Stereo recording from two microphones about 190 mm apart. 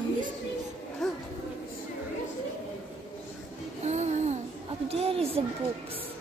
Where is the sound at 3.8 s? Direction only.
35° right (ahead or behind).